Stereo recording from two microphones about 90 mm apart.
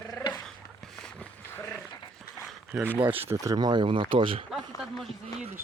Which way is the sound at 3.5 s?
55° right (ahead or behind).